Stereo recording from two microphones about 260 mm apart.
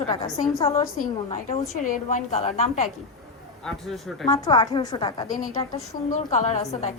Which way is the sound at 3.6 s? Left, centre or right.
Centre.